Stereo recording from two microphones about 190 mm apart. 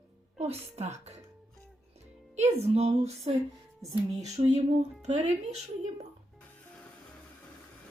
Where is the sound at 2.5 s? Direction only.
35° right (ahead or behind).